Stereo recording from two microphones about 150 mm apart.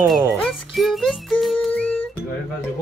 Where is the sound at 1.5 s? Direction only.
5° left (ahead or behind).